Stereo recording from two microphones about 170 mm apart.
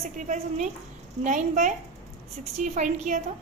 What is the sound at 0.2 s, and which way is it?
A woman's voice, 45° right (ahead or behind).